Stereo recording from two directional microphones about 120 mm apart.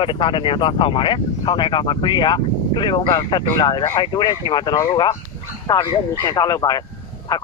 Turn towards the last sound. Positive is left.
turn(degrees=30)  # may be behind; listen again after turning